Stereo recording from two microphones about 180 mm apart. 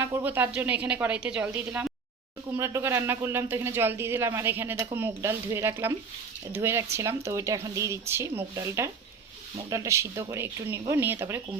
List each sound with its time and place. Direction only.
0.0 s speech: 10° right (ahead or behind)